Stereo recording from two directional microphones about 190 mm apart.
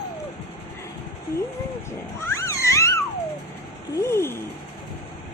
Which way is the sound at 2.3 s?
15° left (ahead or behind).